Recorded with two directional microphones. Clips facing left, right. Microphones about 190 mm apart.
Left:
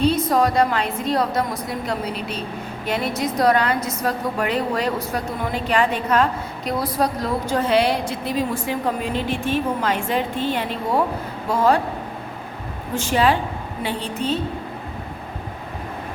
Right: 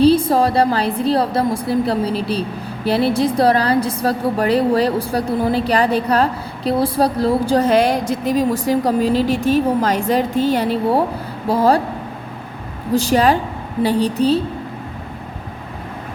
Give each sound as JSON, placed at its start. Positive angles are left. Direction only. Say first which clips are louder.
{"t": 0.0, "sound": "a woman's voice", "louder": "right 5 dB", "side_deg": -30}
{"t": 12.9, "sound": "a woman's voice", "louder": "right 5 dB", "side_deg": -35}